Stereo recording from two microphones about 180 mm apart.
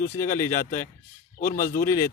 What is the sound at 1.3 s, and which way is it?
Speech, 50° left (ahead or behind).